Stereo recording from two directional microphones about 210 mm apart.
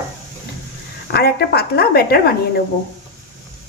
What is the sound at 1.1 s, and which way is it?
Speech, 50° left (ahead or behind).